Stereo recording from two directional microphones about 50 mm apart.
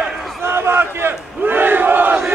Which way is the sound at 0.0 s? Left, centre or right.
Centre.